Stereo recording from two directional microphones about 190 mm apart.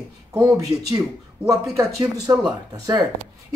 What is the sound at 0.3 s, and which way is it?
Speech, 15° right (ahead or behind).